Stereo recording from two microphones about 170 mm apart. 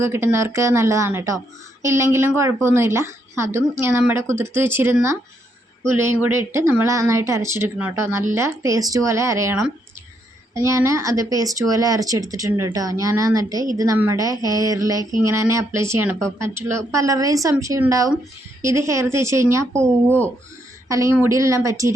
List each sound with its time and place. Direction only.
0.0 s speech: 15° right (ahead or behind)